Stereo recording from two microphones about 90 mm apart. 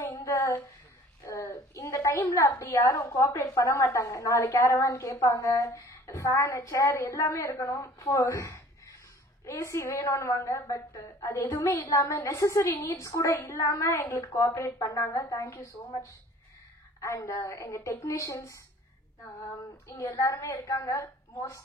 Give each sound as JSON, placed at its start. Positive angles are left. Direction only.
{"t": 0.0, "sound": "a sound", "side_deg": 35}
{"t": 2.6, "sound": "a woman's voice", "side_deg": 35}
{"t": 20.0, "sound": "a woman's voice", "side_deg": 40}